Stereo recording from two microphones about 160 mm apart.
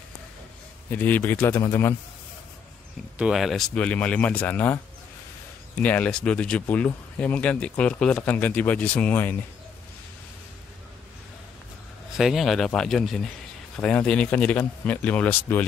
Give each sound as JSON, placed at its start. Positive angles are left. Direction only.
{"t": 0.8, "sound": "speech", "side_deg": 10}
{"t": 3.2, "sound": "speech", "side_deg": 0}
{"t": 5.8, "sound": "speech", "side_deg": 10}
{"t": 12.2, "sound": "speech", "side_deg": 0}